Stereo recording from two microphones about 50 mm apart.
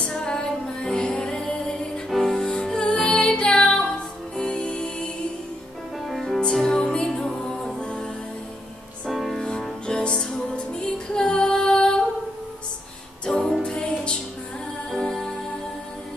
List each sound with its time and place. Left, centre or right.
0.0 s music: centre
2.0 s music: centre
2.6 s music: centre
6.0 s music: centre
6.4 s music: centre
9.0 s music: centre
9.4 s music: centre
13.2 s music: centre